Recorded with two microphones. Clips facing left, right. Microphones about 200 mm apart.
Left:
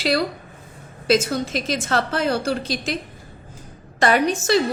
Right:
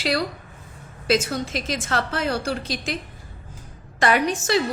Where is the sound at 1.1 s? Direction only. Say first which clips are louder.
Left 3 dB; 40° left (ahead or behind).